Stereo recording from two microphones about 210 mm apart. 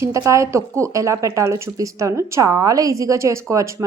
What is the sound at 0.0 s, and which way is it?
A woman's voice, 15° right (ahead or behind).